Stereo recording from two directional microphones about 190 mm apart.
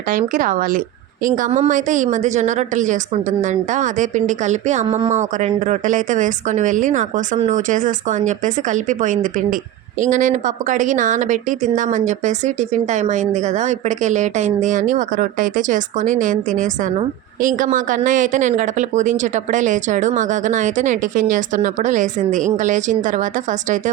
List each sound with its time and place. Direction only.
0.1 s a woman's voice: 45° right (ahead or behind)